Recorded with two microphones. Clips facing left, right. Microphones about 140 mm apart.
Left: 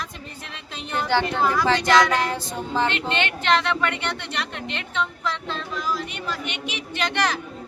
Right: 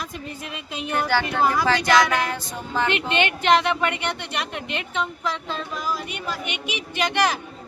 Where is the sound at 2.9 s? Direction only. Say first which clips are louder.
Right 3 dB; 10° right (ahead or behind).